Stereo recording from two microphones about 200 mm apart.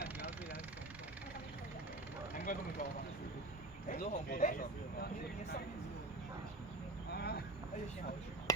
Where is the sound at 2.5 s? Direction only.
45° left (ahead or behind).